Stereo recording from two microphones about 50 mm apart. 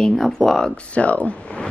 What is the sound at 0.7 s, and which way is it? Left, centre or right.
Speech, left.